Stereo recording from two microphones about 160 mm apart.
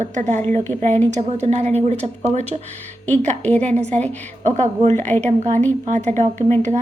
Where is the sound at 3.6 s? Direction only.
45° right (ahead or behind).